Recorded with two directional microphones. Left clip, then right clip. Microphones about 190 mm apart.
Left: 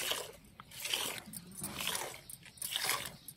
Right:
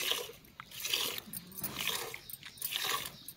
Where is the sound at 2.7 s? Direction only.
20° left (ahead or behind).